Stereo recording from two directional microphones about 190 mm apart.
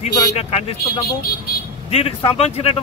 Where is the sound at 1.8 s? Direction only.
30° left (ahead or behind).